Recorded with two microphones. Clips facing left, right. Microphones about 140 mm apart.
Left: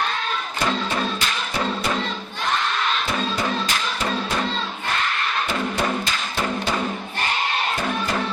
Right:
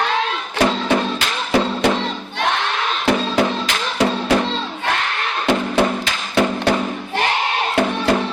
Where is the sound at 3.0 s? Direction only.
90° right.